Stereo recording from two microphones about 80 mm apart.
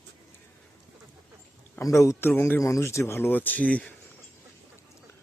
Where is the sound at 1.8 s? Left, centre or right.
Left.